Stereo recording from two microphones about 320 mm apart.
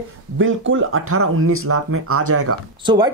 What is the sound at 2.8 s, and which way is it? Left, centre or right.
Speech, centre.